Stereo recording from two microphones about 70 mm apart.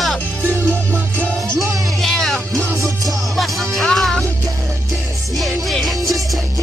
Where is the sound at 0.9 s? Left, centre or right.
Right.